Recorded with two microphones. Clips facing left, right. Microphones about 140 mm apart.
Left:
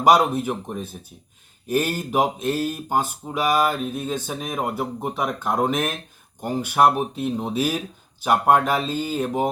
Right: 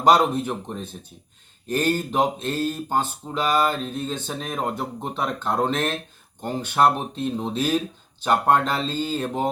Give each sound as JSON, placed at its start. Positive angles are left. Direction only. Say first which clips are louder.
{"t": 0.0, "sound": "speech", "louder": "left 1 dB", "side_deg": 10}